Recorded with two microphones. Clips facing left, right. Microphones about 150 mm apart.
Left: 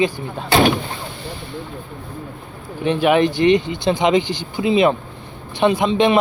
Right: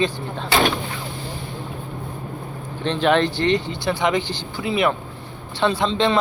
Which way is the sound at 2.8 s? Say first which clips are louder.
Left 3 dB; 10° left (ahead or behind).